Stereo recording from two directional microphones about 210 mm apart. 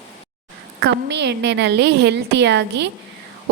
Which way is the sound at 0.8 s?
55° right (ahead or behind).